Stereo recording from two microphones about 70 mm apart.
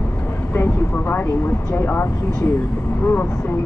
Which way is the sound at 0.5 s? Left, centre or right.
Left.